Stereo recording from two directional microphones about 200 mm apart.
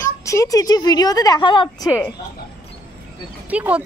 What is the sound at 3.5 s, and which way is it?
Speech, 5° right (ahead or behind).